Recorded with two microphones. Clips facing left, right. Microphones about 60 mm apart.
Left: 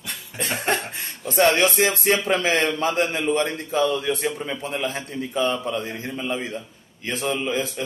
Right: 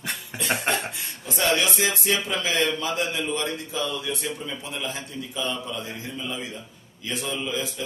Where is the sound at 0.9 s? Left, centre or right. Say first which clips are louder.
Left 3 dB; left.